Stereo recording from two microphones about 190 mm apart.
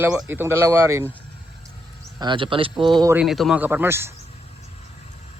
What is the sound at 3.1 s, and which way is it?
Speech, 5° right (ahead or behind).